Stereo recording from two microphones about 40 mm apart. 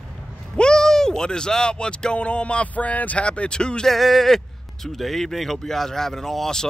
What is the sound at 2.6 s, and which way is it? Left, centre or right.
Speech, left.